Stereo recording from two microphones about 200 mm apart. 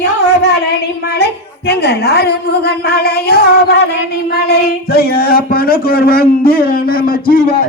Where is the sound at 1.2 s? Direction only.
55° left (ahead or behind).